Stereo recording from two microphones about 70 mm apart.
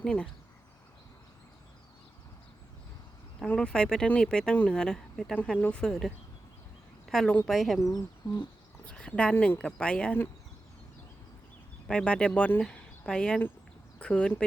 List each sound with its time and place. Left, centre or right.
0.0 s speech: centre
3.4 s speech: centre
4.8 s speech: centre
7.1 s a woman's voice: centre
7.8 s speech: left
8.9 s speech: centre
11.9 s speech: centre